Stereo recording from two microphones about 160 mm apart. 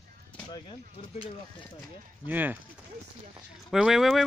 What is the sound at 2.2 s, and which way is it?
Speech, 10° right (ahead or behind).